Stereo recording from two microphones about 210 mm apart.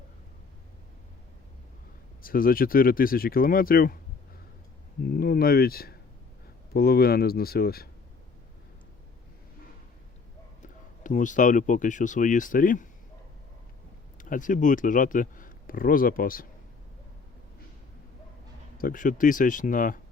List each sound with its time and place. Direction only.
2.2 s speech: 40° left (ahead or behind)
5.0 s speech: 45° left (ahead or behind)
10.6 s speech: 35° left (ahead or behind)
14.2 s speech: 40° left (ahead or behind)
18.8 s speech: 40° left (ahead or behind)